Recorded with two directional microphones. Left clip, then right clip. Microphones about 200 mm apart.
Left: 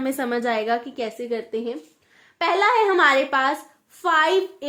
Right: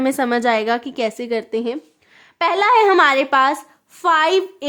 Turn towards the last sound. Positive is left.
turn(degrees=-50)  # may be behind; listen again after turning